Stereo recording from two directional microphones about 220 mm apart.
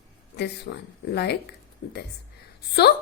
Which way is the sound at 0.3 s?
50° left (ahead or behind).